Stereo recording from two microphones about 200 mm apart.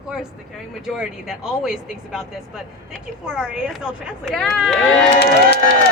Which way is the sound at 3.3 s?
5° right (ahead or behind).